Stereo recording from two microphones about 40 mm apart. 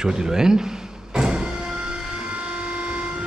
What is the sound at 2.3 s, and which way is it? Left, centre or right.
Train, right.